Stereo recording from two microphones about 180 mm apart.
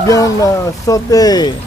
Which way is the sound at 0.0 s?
20° left (ahead or behind).